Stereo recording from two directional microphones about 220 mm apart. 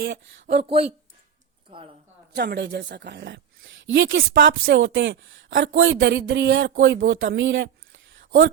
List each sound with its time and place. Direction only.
0.0 s speech: 50° right (ahead or behind)
2.3 s a woman's voice: 50° right (ahead or behind)